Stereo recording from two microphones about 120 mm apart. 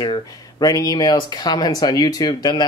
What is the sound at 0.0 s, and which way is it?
Speech, 35° left (ahead or behind).